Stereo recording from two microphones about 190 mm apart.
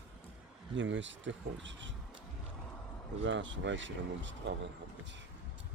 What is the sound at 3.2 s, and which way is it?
Speech, 80° right.